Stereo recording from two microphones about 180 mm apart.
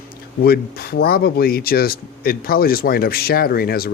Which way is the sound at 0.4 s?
60° left (ahead or behind).